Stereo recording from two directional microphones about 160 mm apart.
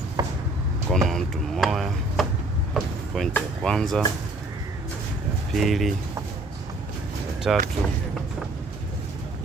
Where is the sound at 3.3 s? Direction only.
5° left (ahead or behind).